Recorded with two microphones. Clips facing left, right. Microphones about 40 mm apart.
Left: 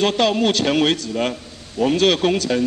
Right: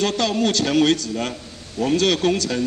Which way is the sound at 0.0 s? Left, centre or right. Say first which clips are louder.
Left 3 dB; centre.